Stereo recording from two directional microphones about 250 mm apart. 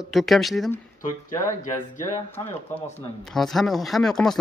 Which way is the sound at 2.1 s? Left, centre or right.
Centre.